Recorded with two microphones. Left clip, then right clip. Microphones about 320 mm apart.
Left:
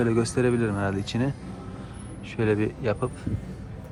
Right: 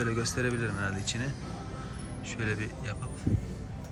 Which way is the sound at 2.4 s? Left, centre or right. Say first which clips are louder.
Left 11 dB; centre.